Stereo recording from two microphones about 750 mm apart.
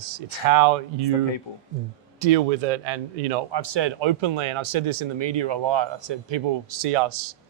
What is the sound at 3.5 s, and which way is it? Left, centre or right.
Speech, right.